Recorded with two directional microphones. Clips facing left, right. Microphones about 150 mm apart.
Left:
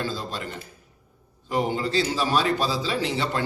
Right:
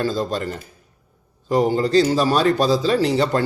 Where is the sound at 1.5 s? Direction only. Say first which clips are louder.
Right 7 dB; 40° right (ahead or behind).